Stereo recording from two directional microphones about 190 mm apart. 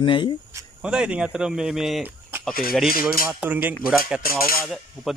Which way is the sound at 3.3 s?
10° right (ahead or behind).